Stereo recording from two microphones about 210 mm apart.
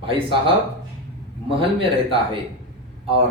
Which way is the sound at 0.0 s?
25° right (ahead or behind).